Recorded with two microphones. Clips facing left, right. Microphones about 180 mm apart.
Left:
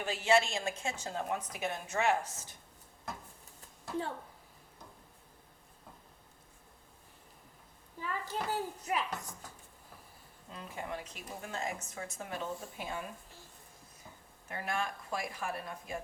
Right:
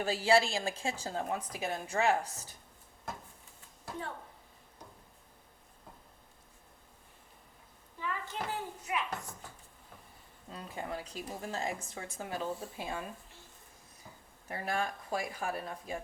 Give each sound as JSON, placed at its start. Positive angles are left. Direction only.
{"t": 0.0, "sound": "a woman's voice", "side_deg": -35}
{"t": 8.0, "sound": "a child's voice", "side_deg": 40}
{"t": 10.5, "sound": "a woman's voice", "side_deg": -35}
{"t": 14.4, "sound": "a woman's voice", "side_deg": -30}